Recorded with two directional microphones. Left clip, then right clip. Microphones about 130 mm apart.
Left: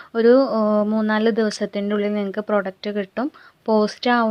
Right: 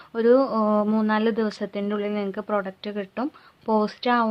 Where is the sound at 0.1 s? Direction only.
40° left (ahead or behind).